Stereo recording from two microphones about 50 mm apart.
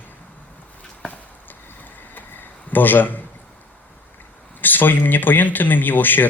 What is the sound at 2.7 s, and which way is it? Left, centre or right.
Speech, left.